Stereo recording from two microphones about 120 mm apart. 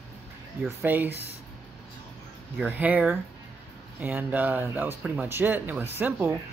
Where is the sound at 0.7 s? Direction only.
15° right (ahead or behind).